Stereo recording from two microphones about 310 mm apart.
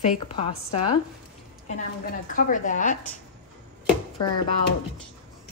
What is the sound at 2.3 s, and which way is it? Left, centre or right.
Speech, left.